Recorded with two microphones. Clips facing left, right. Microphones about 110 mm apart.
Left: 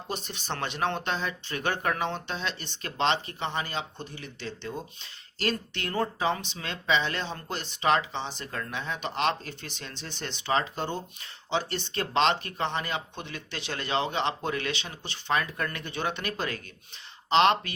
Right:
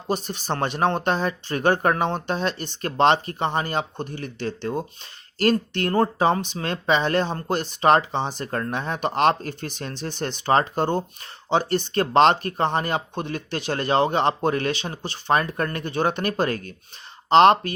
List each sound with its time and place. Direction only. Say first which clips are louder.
0.1 s speech: right 9 dB; 40° right (ahead or behind)